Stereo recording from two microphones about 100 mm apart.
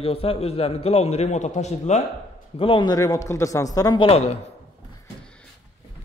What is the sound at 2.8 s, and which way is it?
Speech, 35° left (ahead or behind).